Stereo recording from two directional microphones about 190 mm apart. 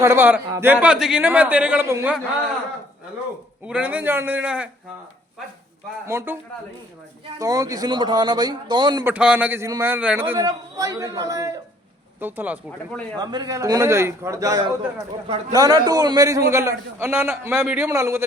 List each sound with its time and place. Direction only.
0.0 s a man's voice: 15° right (ahead or behind)
3.7 s a man's voice: 5° right (ahead or behind)
6.1 s a man's voice: 15° right (ahead or behind)
9.0 s a man's voice: 5° right (ahead or behind)
13.1 s a man's voice: 20° right (ahead or behind)